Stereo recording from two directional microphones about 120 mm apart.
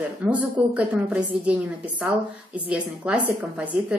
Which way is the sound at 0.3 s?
10° right (ahead or behind).